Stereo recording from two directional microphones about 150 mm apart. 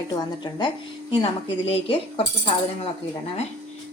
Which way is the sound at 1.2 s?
40° left (ahead or behind).